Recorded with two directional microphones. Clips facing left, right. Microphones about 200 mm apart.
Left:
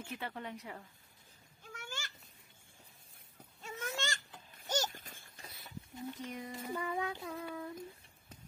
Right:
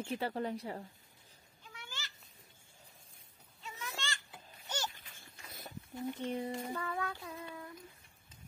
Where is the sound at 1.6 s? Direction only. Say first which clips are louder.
Left 4 dB; 50° left (ahead or behind).